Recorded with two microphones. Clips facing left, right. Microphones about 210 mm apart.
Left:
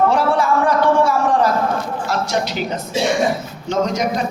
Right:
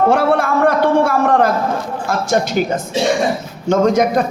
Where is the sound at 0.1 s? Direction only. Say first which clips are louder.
Right 2 dB; 55° right (ahead or behind).